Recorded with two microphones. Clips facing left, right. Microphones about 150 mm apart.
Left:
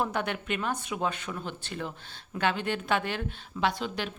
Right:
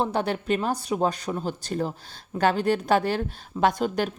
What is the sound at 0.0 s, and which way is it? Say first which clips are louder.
Speech: right 5 dB; 30° right (ahead or behind).